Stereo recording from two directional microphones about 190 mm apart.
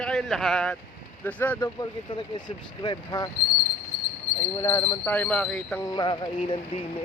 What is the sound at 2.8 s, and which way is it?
Speech, 20° left (ahead or behind).